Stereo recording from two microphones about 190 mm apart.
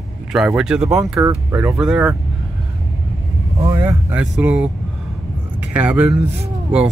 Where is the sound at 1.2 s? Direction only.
15° right (ahead or behind).